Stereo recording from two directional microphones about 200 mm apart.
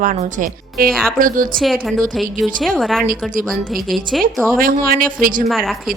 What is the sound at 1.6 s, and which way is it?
A woman's voice, centre (ahead or behind).